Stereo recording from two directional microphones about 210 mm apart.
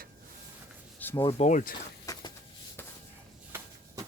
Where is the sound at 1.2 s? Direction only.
35° left (ahead or behind).